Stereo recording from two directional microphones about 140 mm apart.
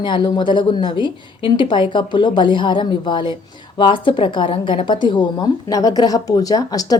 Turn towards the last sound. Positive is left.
turn(degrees=25)  # may be behind; listen again after turning